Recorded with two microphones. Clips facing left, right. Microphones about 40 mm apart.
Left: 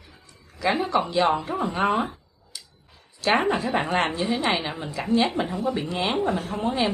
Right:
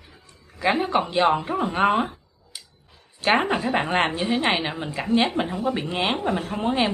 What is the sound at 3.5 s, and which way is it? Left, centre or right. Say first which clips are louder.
A woman's voice: right 1 dB; right.